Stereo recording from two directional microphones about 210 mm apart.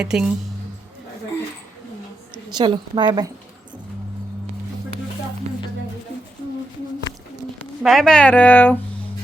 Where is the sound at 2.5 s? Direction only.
20° right (ahead or behind).